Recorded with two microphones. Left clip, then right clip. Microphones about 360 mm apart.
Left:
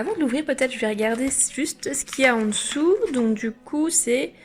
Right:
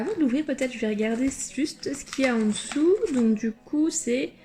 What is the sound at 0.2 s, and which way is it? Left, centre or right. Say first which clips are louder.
A woman's voice: left 3 dB; centre.